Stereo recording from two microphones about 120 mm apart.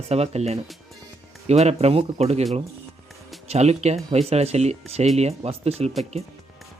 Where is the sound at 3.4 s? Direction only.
65° right (ahead or behind).